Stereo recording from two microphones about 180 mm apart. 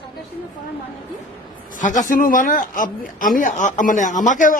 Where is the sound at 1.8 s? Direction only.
45° left (ahead or behind).